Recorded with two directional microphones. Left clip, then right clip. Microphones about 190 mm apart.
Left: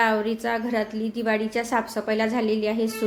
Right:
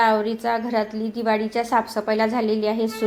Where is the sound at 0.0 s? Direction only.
5° left (ahead or behind).